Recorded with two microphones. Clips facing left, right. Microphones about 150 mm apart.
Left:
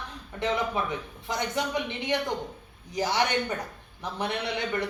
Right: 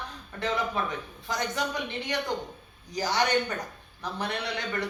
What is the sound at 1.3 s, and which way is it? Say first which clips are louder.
A woman's voice: left 1 dB; 20° left (ahead or behind).